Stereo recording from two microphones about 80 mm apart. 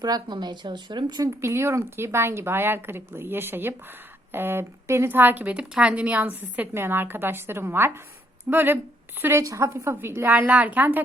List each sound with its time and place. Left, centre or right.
0.0 s speech: right
1.2 s speech: right
9.4 s a woman's voice: right